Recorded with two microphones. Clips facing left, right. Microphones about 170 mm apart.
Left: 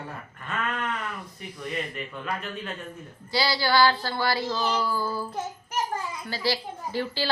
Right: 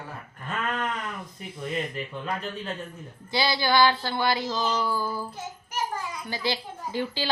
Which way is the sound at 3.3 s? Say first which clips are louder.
Even; 20° right (ahead or behind).